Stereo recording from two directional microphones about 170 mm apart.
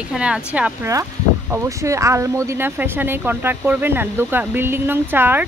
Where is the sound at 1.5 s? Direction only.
20° right (ahead or behind).